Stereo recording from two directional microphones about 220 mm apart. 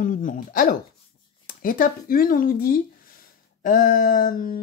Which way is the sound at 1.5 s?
40° left (ahead or behind).